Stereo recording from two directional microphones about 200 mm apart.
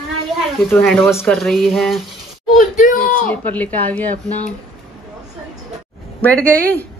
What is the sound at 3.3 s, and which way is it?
Speech, 10° left (ahead or behind).